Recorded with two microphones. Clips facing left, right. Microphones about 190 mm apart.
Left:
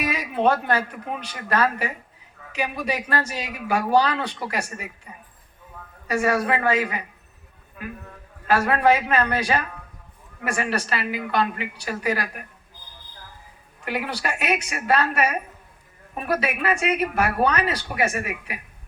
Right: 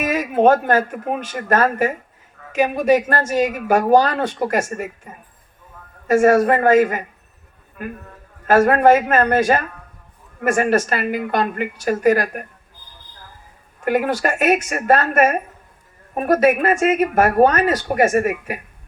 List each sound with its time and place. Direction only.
0.0 s speech: 45° right (ahead or behind)
13.8 s speech: 50° right (ahead or behind)